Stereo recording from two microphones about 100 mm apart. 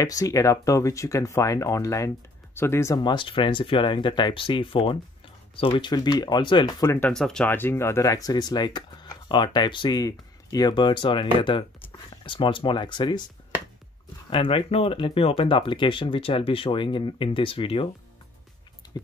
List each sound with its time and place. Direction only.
0.0 s speech: 35° left (ahead or behind)
3.0 s speech: 50° left (ahead or behind)
7.1 s speech: 5° left (ahead or behind)
7.4 s speech: 20° left (ahead or behind); by 13.2 s 50° left (ahead or behind)
14.3 s speech: 60° left (ahead or behind)